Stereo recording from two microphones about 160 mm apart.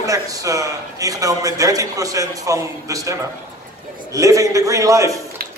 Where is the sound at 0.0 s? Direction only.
20° right (ahead or behind).